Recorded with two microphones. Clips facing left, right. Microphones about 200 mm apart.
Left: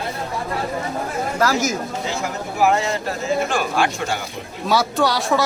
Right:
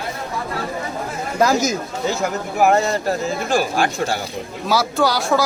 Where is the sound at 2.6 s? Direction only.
45° right (ahead or behind).